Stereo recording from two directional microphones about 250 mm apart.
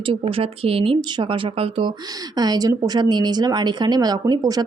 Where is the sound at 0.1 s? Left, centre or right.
Right.